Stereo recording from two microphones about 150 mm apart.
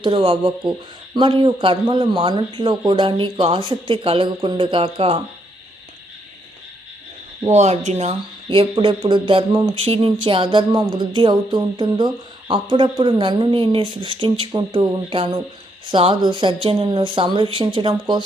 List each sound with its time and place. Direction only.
0.0 s speech: 35° right (ahead or behind)
7.4 s speech: 50° right (ahead or behind)